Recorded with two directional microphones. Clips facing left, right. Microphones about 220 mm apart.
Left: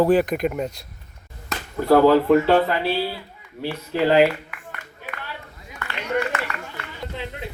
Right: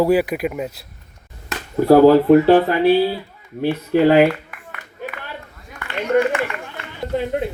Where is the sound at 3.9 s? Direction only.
55° right (ahead or behind).